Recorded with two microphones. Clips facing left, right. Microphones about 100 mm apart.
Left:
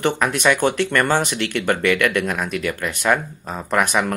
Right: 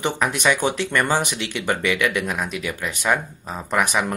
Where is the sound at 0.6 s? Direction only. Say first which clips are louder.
Left 4 dB; 55° left (ahead or behind).